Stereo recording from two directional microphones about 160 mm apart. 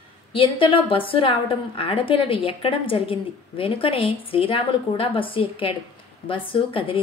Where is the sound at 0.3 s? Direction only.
35° left (ahead or behind).